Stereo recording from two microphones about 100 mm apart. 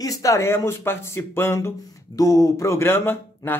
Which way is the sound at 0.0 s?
35° left (ahead or behind).